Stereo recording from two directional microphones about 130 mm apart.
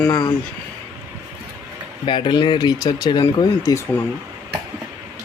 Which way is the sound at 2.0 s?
40° left (ahead or behind).